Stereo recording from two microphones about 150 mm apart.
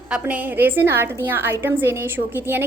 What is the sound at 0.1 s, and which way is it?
A woman's voice, 10° right (ahead or behind).